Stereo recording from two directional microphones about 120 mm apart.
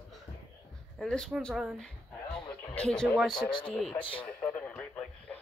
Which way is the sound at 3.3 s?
40° left (ahead or behind).